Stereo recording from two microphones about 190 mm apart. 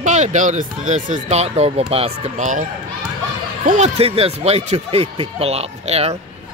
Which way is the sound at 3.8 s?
30° right (ahead or behind).